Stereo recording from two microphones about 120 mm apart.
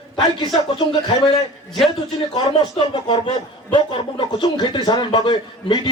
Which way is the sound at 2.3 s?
40° left (ahead or behind).